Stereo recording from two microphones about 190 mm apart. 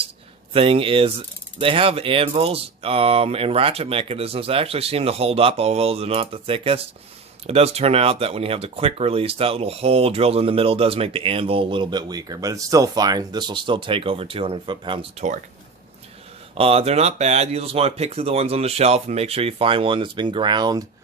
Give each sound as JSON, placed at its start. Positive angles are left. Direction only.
{"t": 0.5, "sound": "speech", "side_deg": -30}
{"t": 16.6, "sound": "speech", "side_deg": -30}